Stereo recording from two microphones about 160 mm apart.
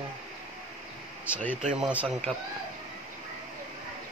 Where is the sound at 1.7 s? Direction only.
5° right (ahead or behind).